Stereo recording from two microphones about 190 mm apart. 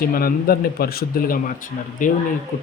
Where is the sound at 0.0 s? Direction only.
50° left (ahead or behind).